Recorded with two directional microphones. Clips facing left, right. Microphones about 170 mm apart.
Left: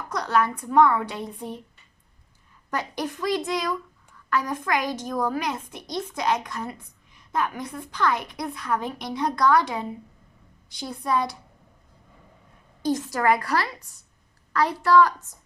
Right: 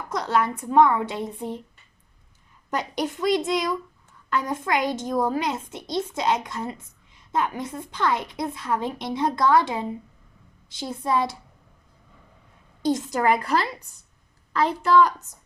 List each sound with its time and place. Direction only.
0.1 s a woman's voice: 20° right (ahead or behind)
2.6 s a woman's voice: 20° right (ahead or behind)
12.8 s a woman's voice: 20° right (ahead or behind)